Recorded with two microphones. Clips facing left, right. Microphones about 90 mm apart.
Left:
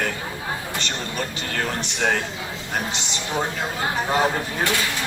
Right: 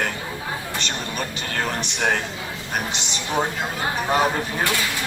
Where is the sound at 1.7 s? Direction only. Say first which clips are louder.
Left 1 dB; 20° right (ahead or behind).